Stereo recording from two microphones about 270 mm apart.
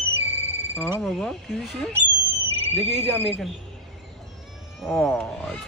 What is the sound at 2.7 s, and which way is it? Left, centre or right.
Speech, right.